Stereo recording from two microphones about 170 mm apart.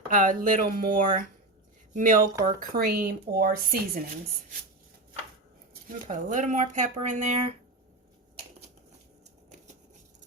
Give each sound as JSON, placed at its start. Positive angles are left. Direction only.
{"t": 0.1, "sound": "speech", "side_deg": -50}
{"t": 2.7, "sound": "a woman's voice", "side_deg": -65}
{"t": 5.9, "sound": "speech", "side_deg": -50}